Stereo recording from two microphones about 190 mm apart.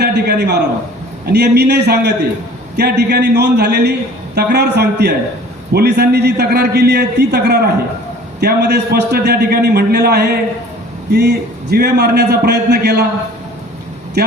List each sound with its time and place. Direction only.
0.0 s a man's voice: 60° right (ahead or behind)
14.2 s a man's voice: 60° right (ahead or behind)